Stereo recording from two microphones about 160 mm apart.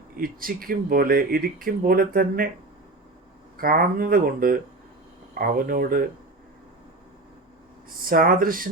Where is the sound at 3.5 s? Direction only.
65° right (ahead or behind).